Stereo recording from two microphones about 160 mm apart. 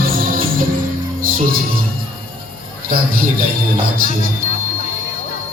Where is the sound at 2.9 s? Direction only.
65° right (ahead or behind).